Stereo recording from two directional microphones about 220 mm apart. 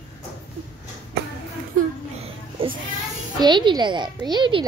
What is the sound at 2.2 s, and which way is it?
Children playing, 25° right (ahead or behind).